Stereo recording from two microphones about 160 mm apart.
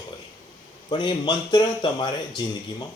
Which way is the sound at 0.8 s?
30° left (ahead or behind).